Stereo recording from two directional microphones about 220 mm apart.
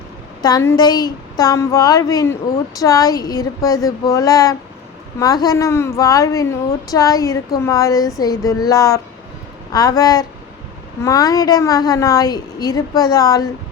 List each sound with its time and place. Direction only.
0.4 s a woman's voice: 15° left (ahead or behind)